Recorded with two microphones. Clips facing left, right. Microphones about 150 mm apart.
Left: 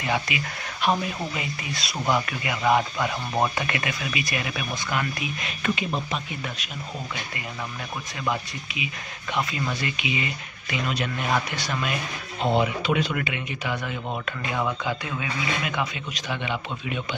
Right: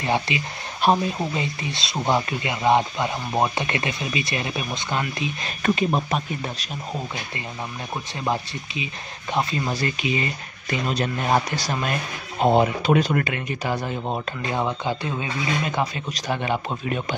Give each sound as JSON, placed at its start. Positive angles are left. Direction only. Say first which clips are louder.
{"t": 0.0, "sound": "speech", "louder": "right 3 dB", "side_deg": -30}
{"t": 5.6, "sound": "speech", "louder": "right 6 dB", "side_deg": -45}
{"t": 8.2, "sound": "speech", "louder": "right 2 dB", "side_deg": -30}